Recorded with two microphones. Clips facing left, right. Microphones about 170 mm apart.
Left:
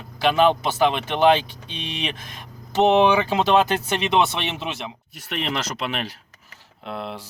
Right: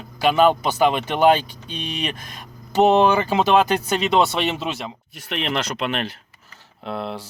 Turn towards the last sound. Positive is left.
turn(degrees=-35)  # may be behind; listen again after turning